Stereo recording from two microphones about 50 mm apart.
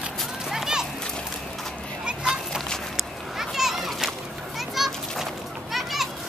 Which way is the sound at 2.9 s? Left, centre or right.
Centre.